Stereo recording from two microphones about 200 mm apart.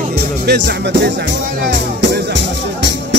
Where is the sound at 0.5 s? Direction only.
55° right (ahead or behind).